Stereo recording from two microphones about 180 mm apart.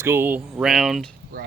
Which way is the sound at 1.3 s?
55° right (ahead or behind).